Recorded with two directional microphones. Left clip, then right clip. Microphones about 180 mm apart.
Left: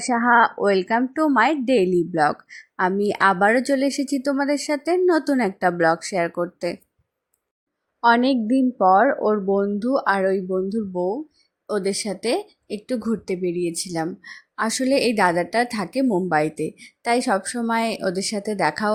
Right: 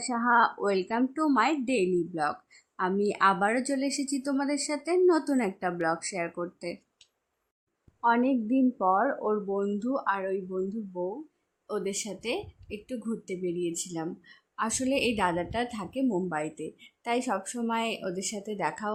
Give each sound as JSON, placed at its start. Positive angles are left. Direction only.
{"t": 0.0, "sound": "a woman's voice", "side_deg": 25}
{"t": 8.0, "sound": "a woman's voice", "side_deg": 30}
{"t": 11.7, "sound": "a woman's voice", "side_deg": 25}